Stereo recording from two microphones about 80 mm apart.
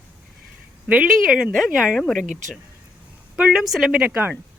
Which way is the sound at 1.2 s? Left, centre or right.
Centre.